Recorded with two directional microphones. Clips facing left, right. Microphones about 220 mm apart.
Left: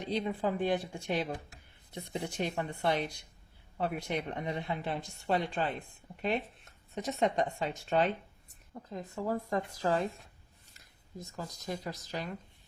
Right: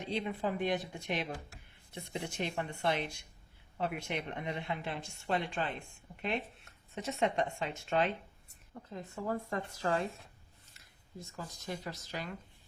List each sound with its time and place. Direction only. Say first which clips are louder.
0.0 s a woman's voice: left 3 dB; 35° left (ahead or behind)
11.3 s a woman's voice: left 3 dB; 35° left (ahead or behind)